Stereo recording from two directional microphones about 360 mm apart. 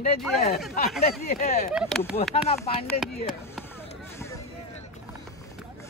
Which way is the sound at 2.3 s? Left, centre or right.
Centre.